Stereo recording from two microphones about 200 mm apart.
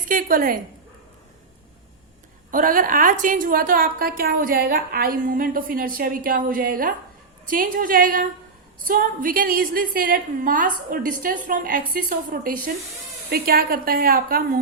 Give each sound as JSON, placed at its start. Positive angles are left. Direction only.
{"t": 0.1, "sound": "a woman's voice", "side_deg": -45}
{"t": 2.5, "sound": "a woman's voice", "side_deg": -45}